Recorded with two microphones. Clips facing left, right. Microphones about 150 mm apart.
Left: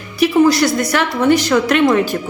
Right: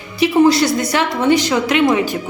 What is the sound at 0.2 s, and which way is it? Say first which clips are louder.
A woman's voice: even; 20° right (ahead or behind).